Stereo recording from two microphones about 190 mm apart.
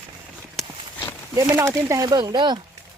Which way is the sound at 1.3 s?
15° right (ahead or behind).